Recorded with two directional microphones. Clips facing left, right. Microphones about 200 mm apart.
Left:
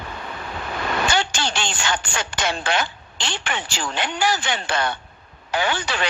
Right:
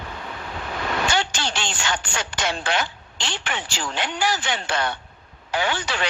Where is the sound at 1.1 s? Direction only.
55° left (ahead or behind).